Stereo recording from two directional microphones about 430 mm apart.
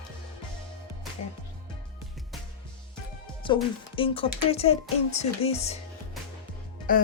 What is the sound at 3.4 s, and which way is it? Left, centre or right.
Speech, centre.